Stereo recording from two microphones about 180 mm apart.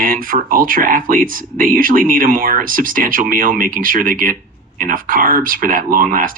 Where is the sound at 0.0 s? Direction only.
50° right (ahead or behind).